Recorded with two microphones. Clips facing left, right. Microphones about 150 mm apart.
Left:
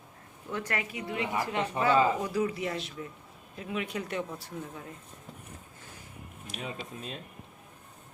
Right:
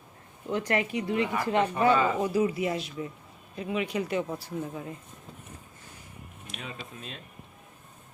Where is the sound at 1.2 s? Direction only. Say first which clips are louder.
Right 4 dB; 20° left (ahead or behind).